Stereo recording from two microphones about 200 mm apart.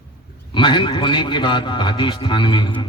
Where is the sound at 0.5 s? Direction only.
25° left (ahead or behind).